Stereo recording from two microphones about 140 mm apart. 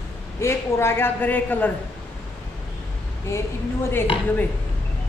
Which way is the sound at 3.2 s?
20° left (ahead or behind).